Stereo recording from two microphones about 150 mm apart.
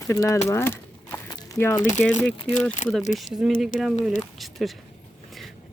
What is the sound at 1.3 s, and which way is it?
Crumpling, 20° left (ahead or behind).